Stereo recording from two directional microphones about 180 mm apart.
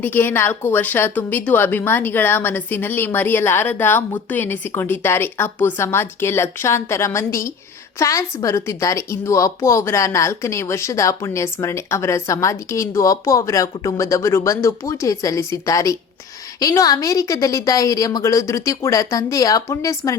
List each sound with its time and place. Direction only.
0.0 s a woman's voice: 10° left (ahead or behind)